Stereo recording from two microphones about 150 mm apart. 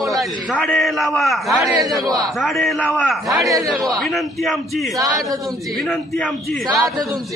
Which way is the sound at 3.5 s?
20° right (ahead or behind).